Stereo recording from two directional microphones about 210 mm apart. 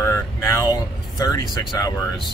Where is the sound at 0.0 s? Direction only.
15° left (ahead or behind).